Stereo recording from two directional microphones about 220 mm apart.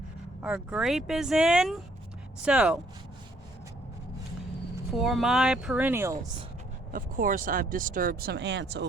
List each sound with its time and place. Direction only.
0.4 s speech: 5° right (ahead or behind)
4.9 s speech: centre (ahead or behind)
6.9 s speech: 40° right (ahead or behind)